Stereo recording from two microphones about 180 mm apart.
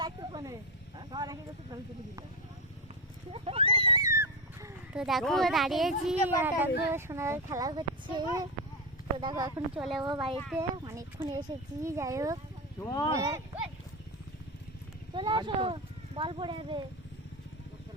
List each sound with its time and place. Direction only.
0.0 s snake: 25° right (ahead or behind)
0.9 s speech: 25° right (ahead or behind)
3.3 s a sound: 30° right (ahead or behind); by 4.7 s 15° right (ahead or behind)
4.9 s speech: centre (ahead or behind); by 9.5 s 25° right (ahead or behind)
9.7 s speech: centre (ahead or behind)
10.0 s speech: 25° right (ahead or behind)
12.8 s speech: 20° left (ahead or behind)
13.1 s speech: 15° right (ahead or behind)
15.1 s speech: 25° right (ahead or behind)